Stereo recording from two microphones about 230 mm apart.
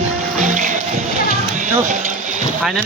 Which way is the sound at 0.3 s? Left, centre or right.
Right.